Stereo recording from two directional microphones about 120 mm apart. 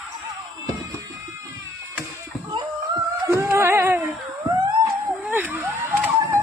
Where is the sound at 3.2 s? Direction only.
25° right (ahead or behind).